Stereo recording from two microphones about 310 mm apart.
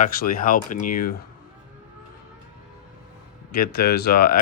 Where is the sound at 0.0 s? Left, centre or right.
Left.